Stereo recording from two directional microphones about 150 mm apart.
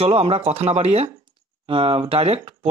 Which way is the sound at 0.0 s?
40° right (ahead or behind).